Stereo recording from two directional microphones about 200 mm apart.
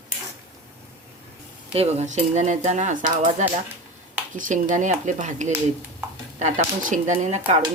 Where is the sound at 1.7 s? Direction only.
30° right (ahead or behind).